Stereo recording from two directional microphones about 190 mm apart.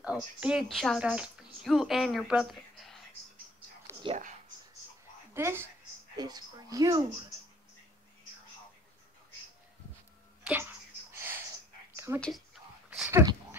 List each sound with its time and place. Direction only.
0.0 s speech: 5° right (ahead or behind)
4.1 s speech: 25° right (ahead or behind)
5.3 s a woman's voice: 10° right (ahead or behind)
10.4 s a sound: 10° right (ahead or behind)
12.1 s speech: 15° right (ahead or behind)
13.1 s a sound: 20° right (ahead or behind)